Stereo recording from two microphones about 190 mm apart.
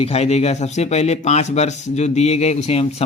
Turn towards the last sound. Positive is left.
turn(degrees=35)  # may be behind; listen again after turning